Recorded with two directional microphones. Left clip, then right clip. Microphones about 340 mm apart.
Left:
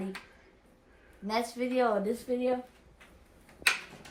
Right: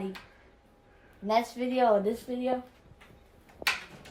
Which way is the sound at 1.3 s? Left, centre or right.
Right.